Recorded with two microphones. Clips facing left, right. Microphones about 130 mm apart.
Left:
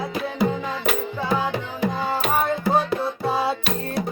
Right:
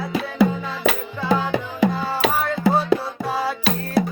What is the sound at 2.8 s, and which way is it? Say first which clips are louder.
Music: right 2 dB; 25° left (ahead or behind).